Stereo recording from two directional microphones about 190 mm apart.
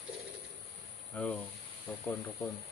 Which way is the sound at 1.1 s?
5° left (ahead or behind).